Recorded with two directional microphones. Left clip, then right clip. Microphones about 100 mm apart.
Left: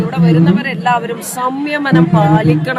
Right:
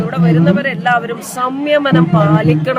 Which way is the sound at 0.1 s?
35° right (ahead or behind).